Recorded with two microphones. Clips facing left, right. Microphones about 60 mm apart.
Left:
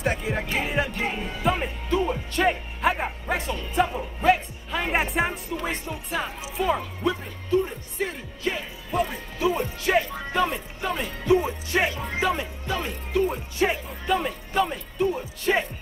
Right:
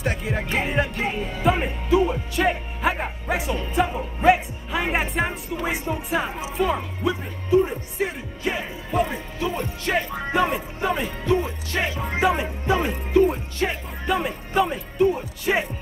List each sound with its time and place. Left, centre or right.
0.0 s music: centre
4.2 s music: right
4.6 s music: centre
6.2 s speech: centre
6.5 s speech: centre
7.5 s music: centre
9.4 s music: centre
10.1 s music: centre
11.2 s music: centre
12.1 s music: centre
13.6 s music: centre